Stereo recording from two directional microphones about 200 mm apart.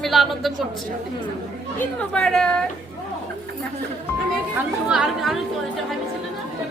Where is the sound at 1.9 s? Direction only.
5° left (ahead or behind).